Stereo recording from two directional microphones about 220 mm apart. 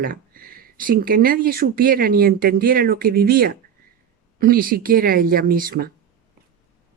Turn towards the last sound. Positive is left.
turn(degrees=-40)  # may be behind; listen again after turning